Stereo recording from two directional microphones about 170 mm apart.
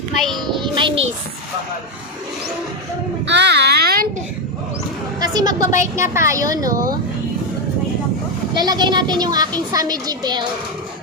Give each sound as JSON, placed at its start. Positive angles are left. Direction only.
{"t": 0.2, "sound": "a child's voice", "side_deg": 0}
{"t": 0.6, "sound": "music", "side_deg": -30}
{"t": 3.2, "sound": "a sound", "side_deg": -90}
{"t": 5.2, "sound": "a woman's voice", "side_deg": -25}
{"t": 8.5, "sound": "a child's voice", "side_deg": -25}